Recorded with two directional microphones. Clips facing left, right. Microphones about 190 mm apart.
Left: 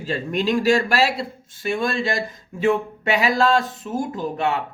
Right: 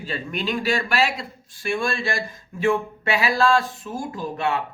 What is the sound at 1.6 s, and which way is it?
Speech, 20° left (ahead or behind).